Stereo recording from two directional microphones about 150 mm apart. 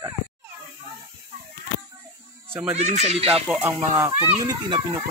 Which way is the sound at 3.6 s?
15° right (ahead or behind).